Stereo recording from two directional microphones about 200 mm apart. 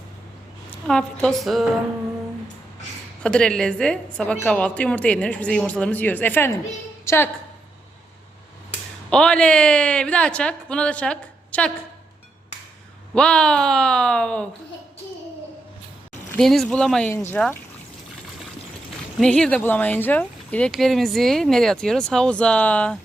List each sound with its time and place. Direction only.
0.9 s speech: 5° left (ahead or behind)
3.2 s a woman's voice: 5° left (ahead or behind)
9.0 s speech: 5° left (ahead or behind)
13.1 s speech: 5° left (ahead or behind)
16.3 s speech: centre (ahead or behind)
19.2 s speech: 5° left (ahead or behind)